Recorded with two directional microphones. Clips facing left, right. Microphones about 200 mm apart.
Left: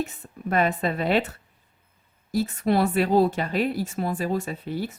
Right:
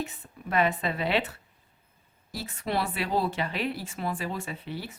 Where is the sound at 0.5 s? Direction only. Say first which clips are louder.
Left 3 dB; 45° left (ahead or behind).